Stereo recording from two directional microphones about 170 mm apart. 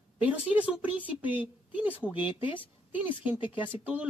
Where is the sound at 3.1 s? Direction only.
30° left (ahead or behind).